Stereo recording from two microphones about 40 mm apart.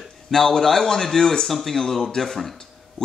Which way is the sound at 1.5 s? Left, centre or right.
Centre.